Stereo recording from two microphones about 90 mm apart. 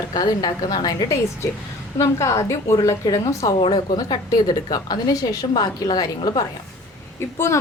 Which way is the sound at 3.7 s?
55° left (ahead or behind).